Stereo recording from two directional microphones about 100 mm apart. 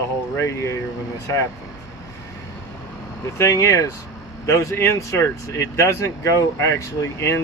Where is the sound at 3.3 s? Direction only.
30° left (ahead or behind).